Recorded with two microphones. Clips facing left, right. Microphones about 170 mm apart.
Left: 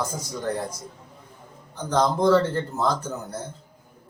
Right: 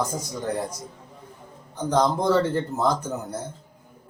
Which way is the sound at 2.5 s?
20° right (ahead or behind).